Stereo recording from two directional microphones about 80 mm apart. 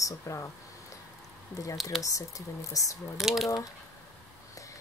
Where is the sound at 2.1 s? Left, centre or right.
Left.